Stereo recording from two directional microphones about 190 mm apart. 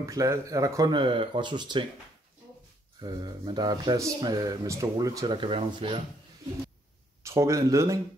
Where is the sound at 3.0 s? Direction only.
20° right (ahead or behind).